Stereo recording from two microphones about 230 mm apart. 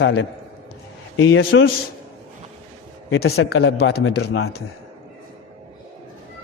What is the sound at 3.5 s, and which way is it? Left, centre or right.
Speech, left.